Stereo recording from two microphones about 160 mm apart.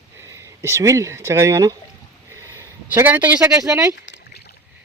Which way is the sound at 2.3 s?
20° right (ahead or behind).